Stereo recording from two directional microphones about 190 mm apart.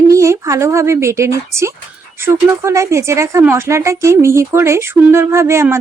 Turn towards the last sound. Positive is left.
turn(degrees=-15)  # may be behind; listen again after turning